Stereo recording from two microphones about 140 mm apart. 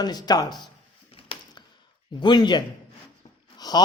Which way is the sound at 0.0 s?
30° left (ahead or behind).